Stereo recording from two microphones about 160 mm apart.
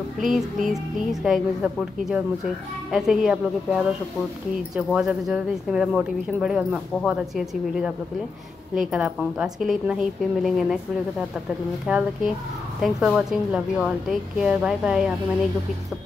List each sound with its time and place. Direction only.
0.2 s a woman's voice: centre (ahead or behind)
4.9 s a woman's voice: 5° right (ahead or behind)